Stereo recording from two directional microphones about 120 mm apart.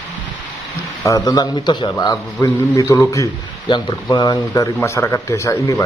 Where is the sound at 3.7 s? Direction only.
40° left (ahead or behind).